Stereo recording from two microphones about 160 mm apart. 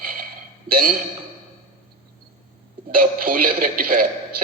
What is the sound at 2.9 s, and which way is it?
Speech, 60° right (ahead or behind).